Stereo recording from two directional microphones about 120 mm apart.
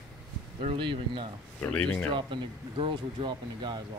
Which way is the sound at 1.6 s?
10° left (ahead or behind).